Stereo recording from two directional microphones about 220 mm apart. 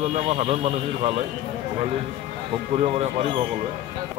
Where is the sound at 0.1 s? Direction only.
25° right (ahead or behind).